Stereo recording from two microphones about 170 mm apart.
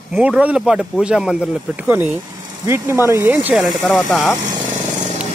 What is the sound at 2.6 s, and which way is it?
Speech, 15° right (ahead or behind).